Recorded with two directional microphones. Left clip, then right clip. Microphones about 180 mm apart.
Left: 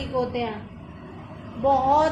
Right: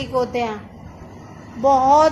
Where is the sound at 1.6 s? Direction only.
35° right (ahead or behind).